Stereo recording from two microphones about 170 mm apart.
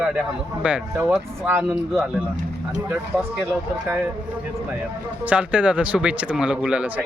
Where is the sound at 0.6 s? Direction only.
10° right (ahead or behind).